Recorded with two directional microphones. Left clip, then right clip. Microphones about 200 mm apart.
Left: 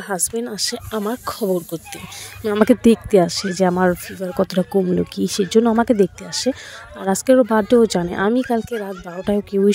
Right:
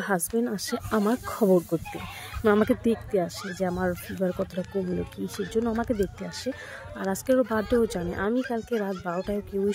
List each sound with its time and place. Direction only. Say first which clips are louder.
0.1 s speech: left 4 dB; 50° left (ahead or behind)